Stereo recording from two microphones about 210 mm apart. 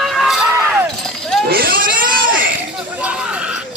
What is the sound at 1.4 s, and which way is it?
Baby cry, 45° right (ahead or behind).